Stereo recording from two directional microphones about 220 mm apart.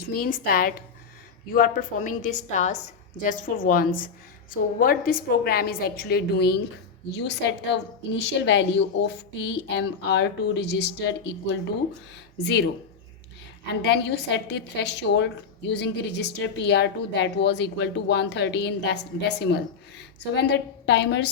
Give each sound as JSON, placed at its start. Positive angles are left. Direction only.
{"t": 0.1, "sound": "a woman's voice", "side_deg": 40}
{"t": 13.8, "sound": "a woman's voice", "side_deg": 50}